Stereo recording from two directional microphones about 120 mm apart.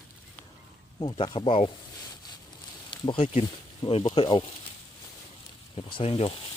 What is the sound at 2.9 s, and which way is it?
Speech, 50° left (ahead or behind).